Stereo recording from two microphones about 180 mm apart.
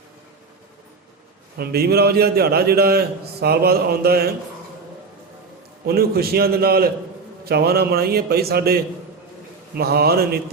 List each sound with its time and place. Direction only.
1.5 s a man's voice: 60° right (ahead or behind)
5.8 s a man's voice: 60° right (ahead or behind)